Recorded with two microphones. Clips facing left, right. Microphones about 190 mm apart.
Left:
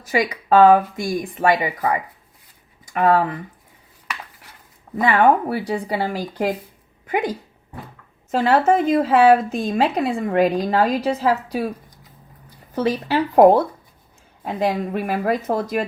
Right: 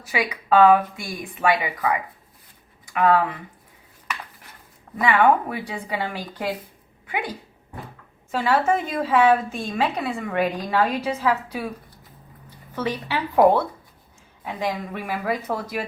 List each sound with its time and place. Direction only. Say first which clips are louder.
0.1 s a woman's voice: left 4 dB; 40° left (ahead or behind)
5.0 s a woman's voice: left 2 dB; 40° left (ahead or behind)
12.7 s a woman's voice: left 6 dB; 40° left (ahead or behind)